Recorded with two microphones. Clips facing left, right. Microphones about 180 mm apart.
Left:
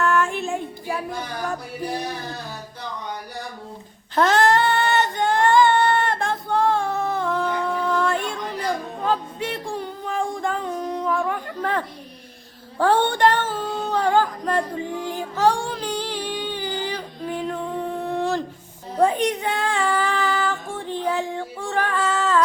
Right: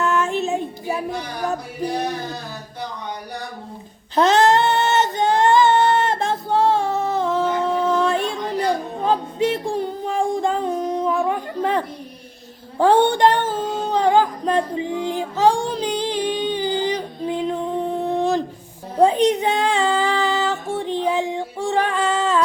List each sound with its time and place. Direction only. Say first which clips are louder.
0.0 s child singing: right 1 dB; 20° right (ahead or behind)
4.1 s female singing: right 3 dB; 20° right (ahead or behind)
12.8 s singing: right 3 dB; 20° right (ahead or behind)
18.9 s music: right 4 dB; 20° right (ahead or behind)